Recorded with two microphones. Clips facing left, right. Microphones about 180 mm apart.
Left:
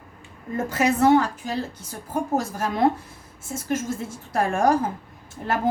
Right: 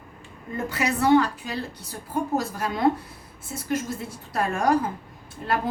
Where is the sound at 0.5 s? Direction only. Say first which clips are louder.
Left 4 dB; 45° left (ahead or behind).